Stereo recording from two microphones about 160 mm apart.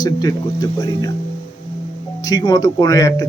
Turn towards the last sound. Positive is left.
turn(degrees=20)  # may be behind; listen again after turning